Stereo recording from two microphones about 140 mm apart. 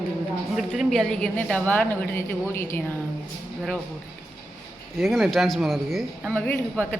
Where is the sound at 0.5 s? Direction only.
Centre (ahead or behind); by 2.8 s 15° left (ahead or behind).